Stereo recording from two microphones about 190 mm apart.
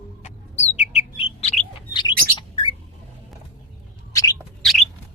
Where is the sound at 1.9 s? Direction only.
25° left (ahead or behind).